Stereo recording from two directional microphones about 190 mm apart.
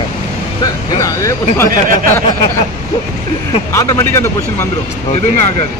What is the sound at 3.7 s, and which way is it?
Speech, 15° left (ahead or behind).